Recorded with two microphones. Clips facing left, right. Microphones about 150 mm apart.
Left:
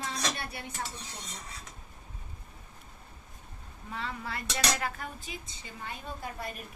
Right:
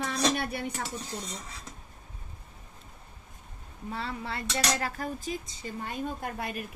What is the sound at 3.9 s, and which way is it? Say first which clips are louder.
Speech: right 2 dB; 30° right (ahead or behind).